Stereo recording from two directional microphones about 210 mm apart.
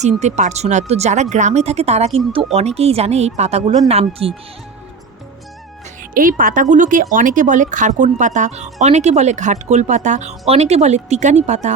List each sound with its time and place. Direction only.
0.0 s speech: 35° right (ahead or behind)
6.1 s speech: 40° right (ahead or behind)